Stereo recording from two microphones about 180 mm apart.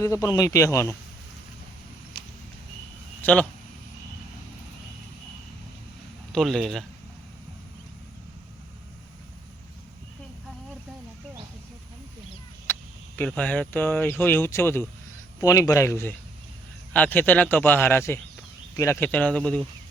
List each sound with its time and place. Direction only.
0.0 s speech: 20° left (ahead or behind)
2.1 s a sound: 25° left (ahead or behind)
3.2 s speech: 10° left (ahead or behind)
6.3 s speech: centre (ahead or behind)
12.7 s a sound: 10° left (ahead or behind)
13.1 s speech: 5° left (ahead or behind)